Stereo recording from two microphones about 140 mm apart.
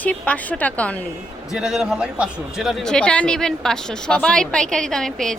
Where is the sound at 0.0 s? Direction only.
10° left (ahead or behind).